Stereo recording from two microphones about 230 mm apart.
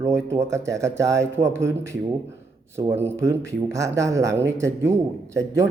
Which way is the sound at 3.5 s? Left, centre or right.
Centre.